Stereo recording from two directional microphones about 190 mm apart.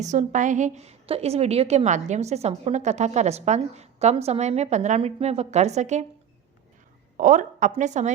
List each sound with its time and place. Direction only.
0.0 s a woman's voice: 40° right (ahead or behind)
7.2 s a woman's voice: 40° right (ahead or behind)